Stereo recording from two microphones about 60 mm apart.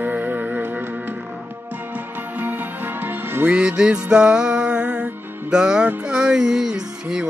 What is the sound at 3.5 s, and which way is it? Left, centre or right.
Music, centre.